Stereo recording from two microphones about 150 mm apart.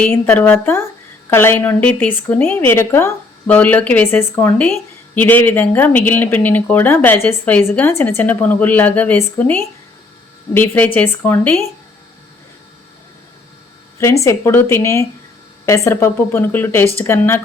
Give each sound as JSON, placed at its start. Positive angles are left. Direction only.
{"t": 0.0, "sound": "a woman's voice", "side_deg": 15}
{"t": 14.3, "sound": "a woman's voice", "side_deg": 15}